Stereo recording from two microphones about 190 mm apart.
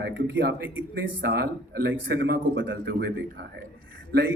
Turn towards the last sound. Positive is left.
turn(degrees=-60)  # may be behind; listen again after turning